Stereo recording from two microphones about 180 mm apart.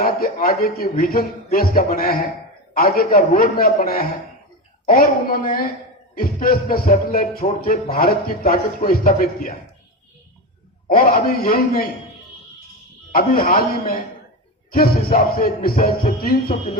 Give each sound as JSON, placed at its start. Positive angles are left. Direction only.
{"t": 0.0, "sound": "a man's voice", "side_deg": 50}
{"t": 10.8, "sound": "a man's voice", "side_deg": 50}
{"t": 13.1, "sound": "a man's voice", "side_deg": 50}